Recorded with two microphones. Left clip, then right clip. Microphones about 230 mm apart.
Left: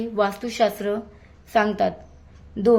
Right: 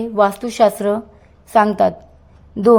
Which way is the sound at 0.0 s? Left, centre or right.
Centre.